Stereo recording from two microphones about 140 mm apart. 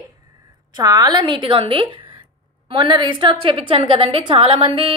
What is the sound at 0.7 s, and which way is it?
A woman's voice, 25° right (ahead or behind).